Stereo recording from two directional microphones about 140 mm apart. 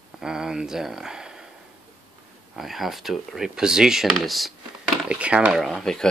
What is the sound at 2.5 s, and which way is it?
Speech, centre (ahead or behind).